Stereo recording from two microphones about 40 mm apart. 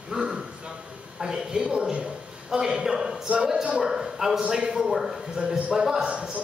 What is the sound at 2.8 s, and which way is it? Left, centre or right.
Speech, centre.